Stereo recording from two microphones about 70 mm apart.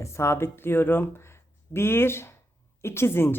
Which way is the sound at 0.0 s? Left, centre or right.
Left.